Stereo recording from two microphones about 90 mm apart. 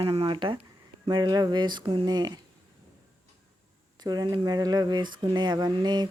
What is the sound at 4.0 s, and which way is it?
Speech, 50° right (ahead or behind).